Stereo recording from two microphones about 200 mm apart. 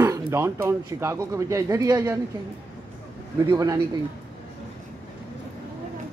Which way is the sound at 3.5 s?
20° right (ahead or behind).